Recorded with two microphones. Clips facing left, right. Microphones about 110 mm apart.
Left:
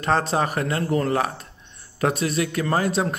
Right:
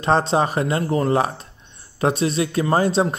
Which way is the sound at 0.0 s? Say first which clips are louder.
Right 3 dB; 25° right (ahead or behind).